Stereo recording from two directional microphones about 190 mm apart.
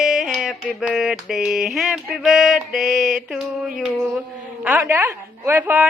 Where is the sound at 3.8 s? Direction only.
5° right (ahead or behind).